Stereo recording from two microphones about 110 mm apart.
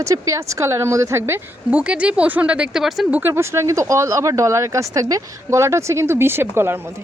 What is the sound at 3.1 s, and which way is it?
Speech, 15° right (ahead or behind).